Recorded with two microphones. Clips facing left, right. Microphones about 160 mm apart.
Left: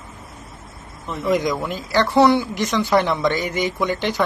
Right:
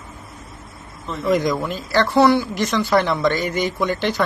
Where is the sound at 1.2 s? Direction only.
15° left (ahead or behind).